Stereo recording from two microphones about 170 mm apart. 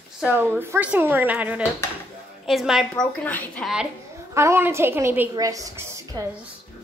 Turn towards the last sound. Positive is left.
turn(degrees=-15)  # may be behind; listen again after turning